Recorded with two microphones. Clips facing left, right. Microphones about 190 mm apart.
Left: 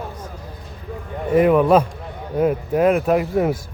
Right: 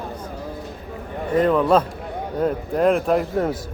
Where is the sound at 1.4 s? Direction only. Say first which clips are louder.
Left 3 dB; 10° left (ahead or behind).